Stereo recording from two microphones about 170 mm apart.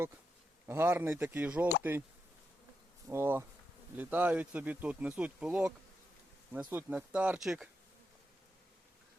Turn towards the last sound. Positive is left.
turn(degrees=0)  # may be behind; listen again after turning